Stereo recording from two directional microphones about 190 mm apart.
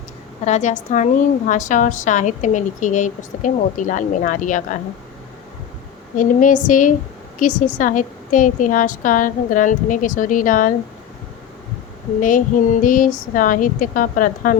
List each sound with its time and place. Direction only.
0.4 s a woman's voice: 35° left (ahead or behind)
6.1 s a woman's voice: 45° left (ahead or behind)
12.8 s a woman's voice: 45° left (ahead or behind)